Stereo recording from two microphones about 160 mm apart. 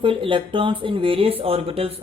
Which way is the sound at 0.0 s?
35° right (ahead or behind).